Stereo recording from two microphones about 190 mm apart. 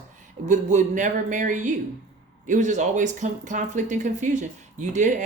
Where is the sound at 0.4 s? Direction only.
40° right (ahead or behind).